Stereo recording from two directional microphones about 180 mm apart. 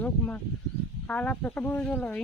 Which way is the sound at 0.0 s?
10° left (ahead or behind).